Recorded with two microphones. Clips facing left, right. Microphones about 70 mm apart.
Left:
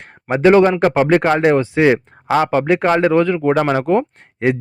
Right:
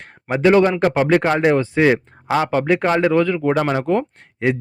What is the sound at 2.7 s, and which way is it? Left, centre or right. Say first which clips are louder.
Speech: left 1 dB; left.